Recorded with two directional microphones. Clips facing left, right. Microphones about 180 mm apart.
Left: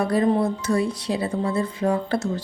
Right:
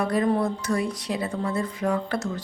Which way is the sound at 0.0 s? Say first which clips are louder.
Left 3 dB; 30° left (ahead or behind).